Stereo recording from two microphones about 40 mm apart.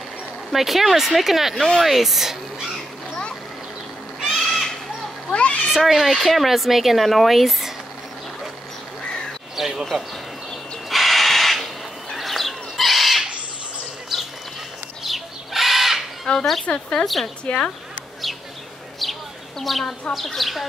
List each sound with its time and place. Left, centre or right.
0.5 s speech: centre
1.5 s speech: centre
4.2 s goat: centre
5.7 s speech: centre
9.6 s bird: centre
10.9 s crow: centre
12.2 s bird: centre
14.1 s a sound: centre
16.3 s a sound: left
16.6 s speech: left
17.0 s a woman's voice: centre
17.5 s speech: left
19.6 s speech: centre